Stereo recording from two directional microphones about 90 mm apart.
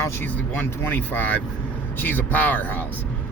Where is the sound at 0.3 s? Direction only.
20° left (ahead or behind).